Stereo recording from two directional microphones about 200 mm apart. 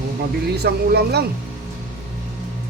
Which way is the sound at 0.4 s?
55° right (ahead or behind).